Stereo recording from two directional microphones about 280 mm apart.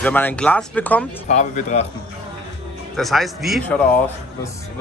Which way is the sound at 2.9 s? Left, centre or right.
Centre.